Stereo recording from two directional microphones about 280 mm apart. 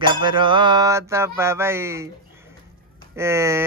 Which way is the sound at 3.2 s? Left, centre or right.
Centre.